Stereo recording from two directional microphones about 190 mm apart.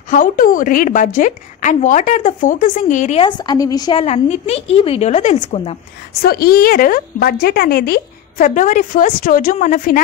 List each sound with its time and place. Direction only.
0.1 s a woman's voice: 45° left (ahead or behind)
3.2 s a woman's voice: 25° left (ahead or behind)
4.0 s a woman's voice: 35° left (ahead or behind)
6.2 s a woman's voice: 50° left (ahead or behind)